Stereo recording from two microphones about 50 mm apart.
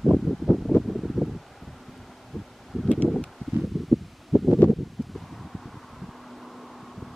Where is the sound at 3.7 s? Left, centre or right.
Centre.